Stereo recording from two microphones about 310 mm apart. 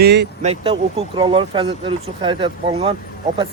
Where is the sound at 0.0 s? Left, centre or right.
Right.